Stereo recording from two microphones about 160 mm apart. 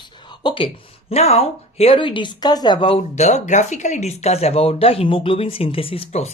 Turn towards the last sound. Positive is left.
turn(degrees=40)  # may be behind; listen again after turning